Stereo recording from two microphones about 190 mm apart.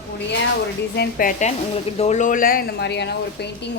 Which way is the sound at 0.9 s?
45° left (ahead or behind).